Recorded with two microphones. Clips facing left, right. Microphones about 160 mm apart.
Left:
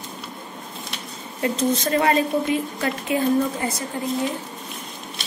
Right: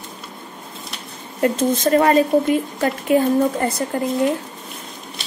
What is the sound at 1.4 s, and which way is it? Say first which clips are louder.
A woman's voice: right 4 dB; 50° right (ahead or behind).